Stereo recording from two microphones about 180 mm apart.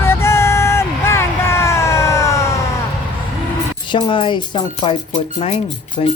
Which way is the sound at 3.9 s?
25° left (ahead or behind).